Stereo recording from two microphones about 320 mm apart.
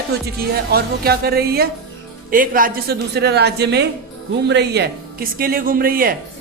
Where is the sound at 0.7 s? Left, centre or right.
Right.